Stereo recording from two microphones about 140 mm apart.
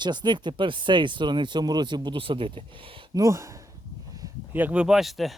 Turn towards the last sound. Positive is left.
turn(degrees=0)  # may be behind; listen again after turning